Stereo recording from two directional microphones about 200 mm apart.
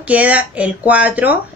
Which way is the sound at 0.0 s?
5° right (ahead or behind).